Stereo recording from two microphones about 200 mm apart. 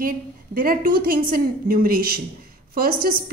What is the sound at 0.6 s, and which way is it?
A woman's voice, 45° right (ahead or behind).